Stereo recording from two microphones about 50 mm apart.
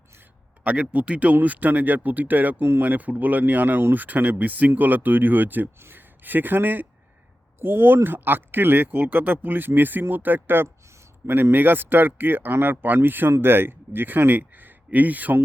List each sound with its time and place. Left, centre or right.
0.6 s speech: right
12.8 s speech: right